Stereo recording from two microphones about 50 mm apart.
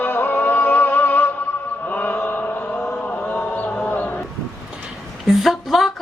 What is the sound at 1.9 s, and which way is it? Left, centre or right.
Mantra, left.